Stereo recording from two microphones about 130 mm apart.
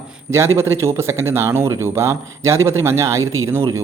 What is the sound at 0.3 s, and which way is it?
Speech, 20° right (ahead or behind).